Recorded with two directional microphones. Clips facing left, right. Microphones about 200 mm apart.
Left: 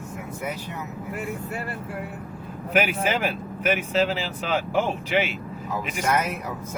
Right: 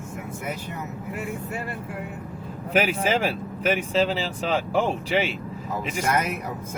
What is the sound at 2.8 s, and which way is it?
Speech, 30° right (ahead or behind).